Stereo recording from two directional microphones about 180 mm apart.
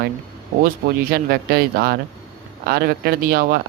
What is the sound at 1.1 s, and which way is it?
Speech, 55° right (ahead or behind).